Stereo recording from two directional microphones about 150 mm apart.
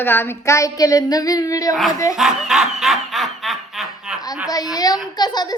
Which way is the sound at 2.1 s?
5° right (ahead or behind).